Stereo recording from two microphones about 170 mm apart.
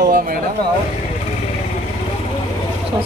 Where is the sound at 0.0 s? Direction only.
60° right (ahead or behind).